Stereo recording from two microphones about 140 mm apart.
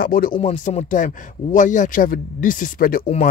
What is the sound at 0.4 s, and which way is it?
A man's voice, 50° left (ahead or behind).